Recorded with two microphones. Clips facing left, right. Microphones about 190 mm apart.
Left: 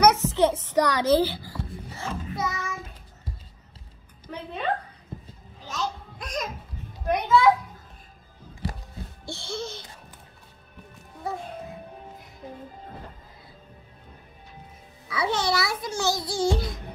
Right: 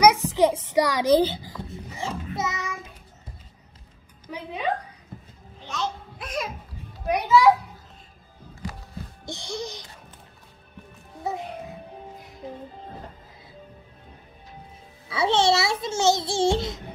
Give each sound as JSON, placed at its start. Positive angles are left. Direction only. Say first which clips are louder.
{"t": 0.0, "sound": "a child's voice", "louder": "right 1 dB", "side_deg": -15}
{"t": 1.7, "sound": "child singing", "louder": "right 5 dB", "side_deg": -20}
{"t": 4.3, "sound": "a woman's voice", "louder": "right 1 dB", "side_deg": -15}
{"t": 5.7, "sound": "music", "louder": "right 1 dB", "side_deg": 0}
{"t": 7.1, "sound": "speech", "louder": "right 2 dB", "side_deg": -10}
{"t": 9.2, "sound": "speech", "louder": "even", "side_deg": -15}
{"t": 15.0, "sound": "a child's voice", "louder": "right 5 dB", "side_deg": -25}